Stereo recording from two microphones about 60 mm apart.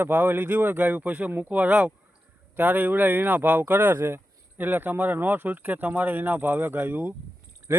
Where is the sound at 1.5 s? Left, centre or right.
Centre.